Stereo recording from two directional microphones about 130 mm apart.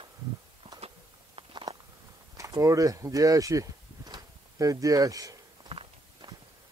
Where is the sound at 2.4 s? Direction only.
25° right (ahead or behind).